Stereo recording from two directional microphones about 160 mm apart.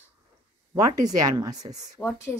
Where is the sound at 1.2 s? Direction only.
25° right (ahead or behind).